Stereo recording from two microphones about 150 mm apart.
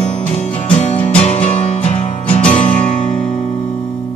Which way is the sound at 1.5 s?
45° left (ahead or behind).